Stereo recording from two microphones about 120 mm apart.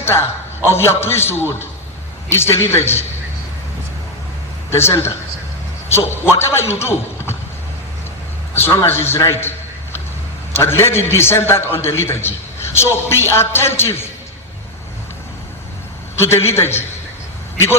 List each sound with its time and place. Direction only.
0.0 s a man's voice: 20° left (ahead or behind)
4.7 s a man's voice: 20° left (ahead or behind)
8.5 s a man's voice: 20° left (ahead or behind)
10.5 s a man's voice: 20° left (ahead or behind)
16.1 s a man's voice: 20° left (ahead or behind)